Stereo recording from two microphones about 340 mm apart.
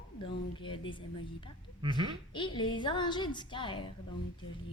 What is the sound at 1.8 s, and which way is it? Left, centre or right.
Speech, centre.